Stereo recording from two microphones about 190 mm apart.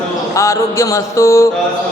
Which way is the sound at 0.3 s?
15° left (ahead or behind).